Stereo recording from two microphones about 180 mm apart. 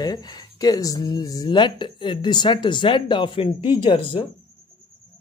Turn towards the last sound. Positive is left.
turn(degrees=25)  # may be behind; listen again after turning